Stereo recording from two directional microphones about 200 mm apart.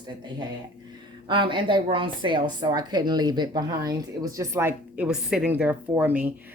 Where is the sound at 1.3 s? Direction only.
25° right (ahead or behind).